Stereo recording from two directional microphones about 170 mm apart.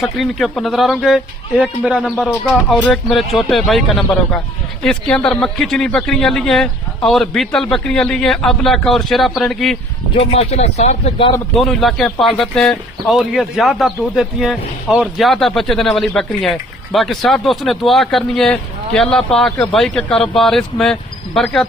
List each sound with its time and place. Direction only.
0.0 s speech: centre (ahead or behind)
10.2 s speech: 40° left (ahead or behind)
11.5 s speech: centre (ahead or behind)